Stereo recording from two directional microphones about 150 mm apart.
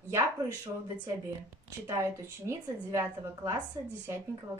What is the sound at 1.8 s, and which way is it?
A woman's voice, 20° right (ahead or behind).